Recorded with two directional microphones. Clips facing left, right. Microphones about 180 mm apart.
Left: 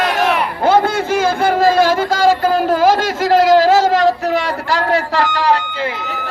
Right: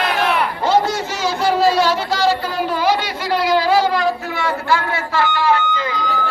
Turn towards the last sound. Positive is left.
turn(degrees=40)  # may be behind; listen again after turning